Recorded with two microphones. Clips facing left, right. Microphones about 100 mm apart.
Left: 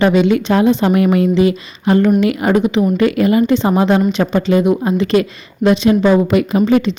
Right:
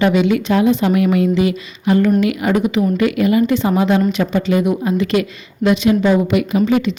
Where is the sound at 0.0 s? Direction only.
35° left (ahead or behind).